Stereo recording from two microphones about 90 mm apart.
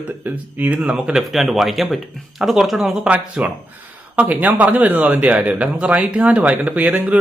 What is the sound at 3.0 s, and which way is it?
Speech, 15° right (ahead or behind).